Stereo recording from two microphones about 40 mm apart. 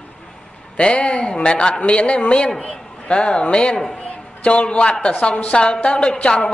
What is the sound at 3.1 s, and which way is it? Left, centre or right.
A woman's voice, left.